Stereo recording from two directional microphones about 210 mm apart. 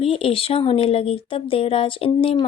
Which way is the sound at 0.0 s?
25° left (ahead or behind).